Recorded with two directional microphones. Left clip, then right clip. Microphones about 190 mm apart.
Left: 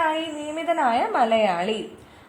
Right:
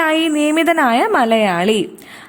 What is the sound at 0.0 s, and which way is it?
A woman's voice, 45° right (ahead or behind).